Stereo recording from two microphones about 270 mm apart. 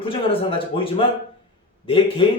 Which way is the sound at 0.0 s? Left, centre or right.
Centre.